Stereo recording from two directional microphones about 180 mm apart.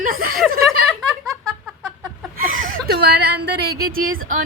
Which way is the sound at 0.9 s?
Centre (ahead or behind).